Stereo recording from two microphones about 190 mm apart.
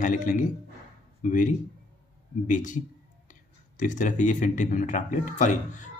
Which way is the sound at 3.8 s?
40° left (ahead or behind).